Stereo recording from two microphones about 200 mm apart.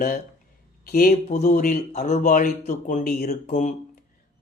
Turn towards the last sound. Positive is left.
turn(degrees=35)  # may be behind; listen again after turning